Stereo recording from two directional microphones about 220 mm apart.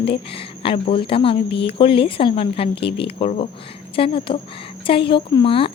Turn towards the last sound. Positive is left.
turn(degrees=25)  # may be behind; listen again after turning